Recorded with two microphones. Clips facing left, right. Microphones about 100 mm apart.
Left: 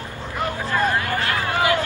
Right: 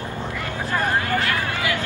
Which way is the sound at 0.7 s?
20° right (ahead or behind).